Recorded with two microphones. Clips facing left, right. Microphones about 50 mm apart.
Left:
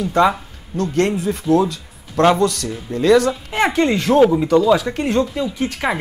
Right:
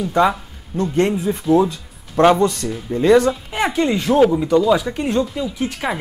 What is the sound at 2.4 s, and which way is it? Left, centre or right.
Speech, right.